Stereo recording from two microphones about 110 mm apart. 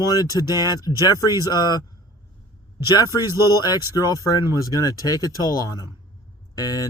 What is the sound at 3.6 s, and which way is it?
Speech, 35° left (ahead or behind).